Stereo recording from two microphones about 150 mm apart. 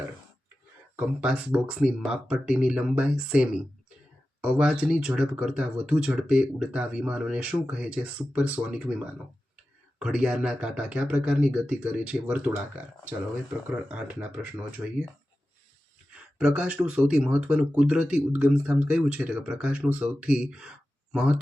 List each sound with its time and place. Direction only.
0.9 s speech: 5° right (ahead or behind)
16.4 s speech: 5° right (ahead or behind)